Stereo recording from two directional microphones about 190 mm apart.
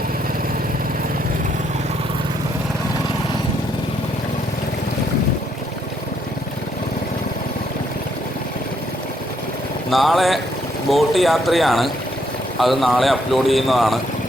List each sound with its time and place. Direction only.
9.9 s speech: centre (ahead or behind)